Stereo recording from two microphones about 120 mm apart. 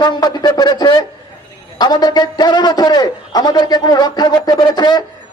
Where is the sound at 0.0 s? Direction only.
35° left (ahead or behind).